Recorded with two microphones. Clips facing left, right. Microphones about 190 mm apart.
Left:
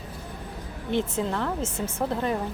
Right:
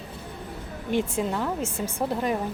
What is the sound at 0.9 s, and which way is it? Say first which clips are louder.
Speech: right 1 dB; 10° right (ahead or behind).